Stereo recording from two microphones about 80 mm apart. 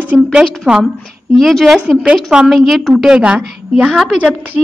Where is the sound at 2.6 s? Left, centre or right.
Centre.